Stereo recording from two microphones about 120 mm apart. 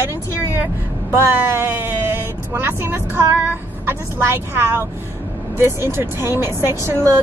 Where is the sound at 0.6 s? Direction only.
20° right (ahead or behind).